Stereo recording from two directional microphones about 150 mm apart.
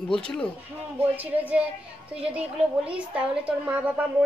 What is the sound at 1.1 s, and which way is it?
A woman's voice, 10° right (ahead or behind).